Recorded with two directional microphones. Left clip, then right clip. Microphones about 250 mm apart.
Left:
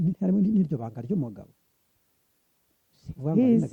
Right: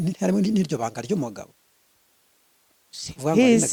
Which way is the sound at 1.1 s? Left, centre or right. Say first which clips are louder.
Right 5 dB; centre.